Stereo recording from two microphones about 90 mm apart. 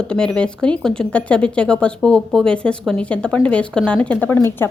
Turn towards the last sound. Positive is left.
turn(degrees=25)  # may be behind; listen again after turning